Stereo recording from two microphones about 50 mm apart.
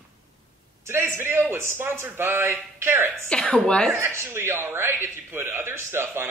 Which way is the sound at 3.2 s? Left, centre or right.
Left.